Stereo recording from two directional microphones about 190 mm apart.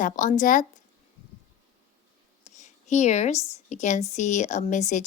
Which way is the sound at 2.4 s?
40° left (ahead or behind).